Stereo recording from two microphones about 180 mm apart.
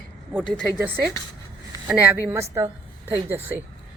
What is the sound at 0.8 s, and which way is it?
A woman's voice, 10° right (ahead or behind).